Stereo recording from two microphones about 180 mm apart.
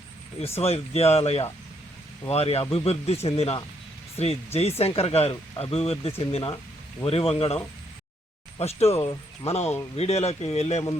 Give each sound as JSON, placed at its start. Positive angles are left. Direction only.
{"t": 0.6, "sound": "speech", "side_deg": 35}